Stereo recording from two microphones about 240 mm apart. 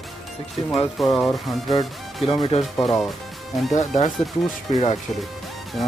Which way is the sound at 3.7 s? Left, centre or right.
Left.